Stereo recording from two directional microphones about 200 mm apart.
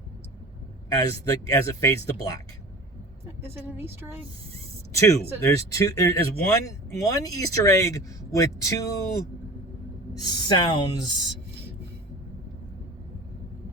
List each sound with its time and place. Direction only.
0.9 s speech: 20° left (ahead or behind)
4.9 s speech: 15° left (ahead or behind)
10.2 s speech: 20° left (ahead or behind)